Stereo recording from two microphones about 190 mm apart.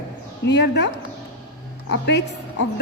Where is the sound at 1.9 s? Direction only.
65° left (ahead or behind).